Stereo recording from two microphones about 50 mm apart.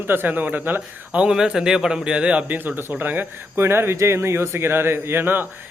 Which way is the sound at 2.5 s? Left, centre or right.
Right.